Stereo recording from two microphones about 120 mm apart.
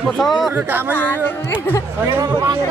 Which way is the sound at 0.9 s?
15° left (ahead or behind).